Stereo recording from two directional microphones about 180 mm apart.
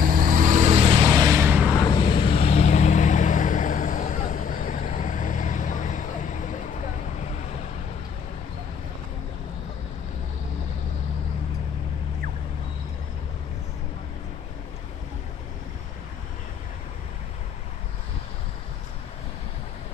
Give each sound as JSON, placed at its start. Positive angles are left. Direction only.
{"t": 0.0, "sound": "vehicle", "side_deg": -50}
{"t": 1.8, "sound": "vehicle", "side_deg": 25}